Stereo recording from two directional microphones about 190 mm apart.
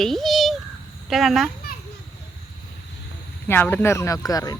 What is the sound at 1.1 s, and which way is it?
Speech, centre (ahead or behind).